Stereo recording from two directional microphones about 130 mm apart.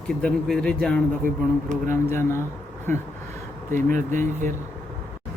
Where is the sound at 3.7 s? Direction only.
85° right.